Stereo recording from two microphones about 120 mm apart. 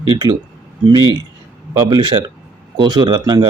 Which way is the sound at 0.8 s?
35° right (ahead or behind).